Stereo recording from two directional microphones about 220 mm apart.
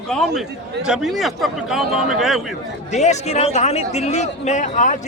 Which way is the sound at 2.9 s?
30° left (ahead or behind).